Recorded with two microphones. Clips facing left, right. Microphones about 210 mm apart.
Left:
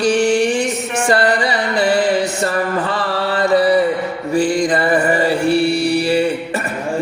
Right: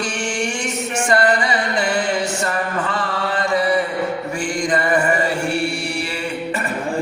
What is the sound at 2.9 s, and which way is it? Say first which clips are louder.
Chant: left 3 dB; 35° left (ahead or behind).